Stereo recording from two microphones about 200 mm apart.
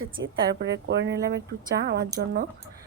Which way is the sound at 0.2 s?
60° right (ahead or behind).